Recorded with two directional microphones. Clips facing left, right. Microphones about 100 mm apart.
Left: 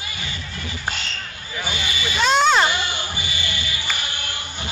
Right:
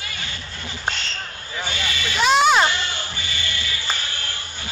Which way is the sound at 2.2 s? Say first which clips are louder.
Right 1 dB; 5° right (ahead or behind).